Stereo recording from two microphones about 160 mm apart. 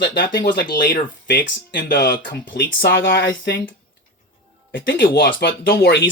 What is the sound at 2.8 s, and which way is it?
Speech, 75° left (ahead or behind).